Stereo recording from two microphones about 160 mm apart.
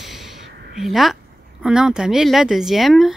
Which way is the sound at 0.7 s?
Centre (ahead or behind).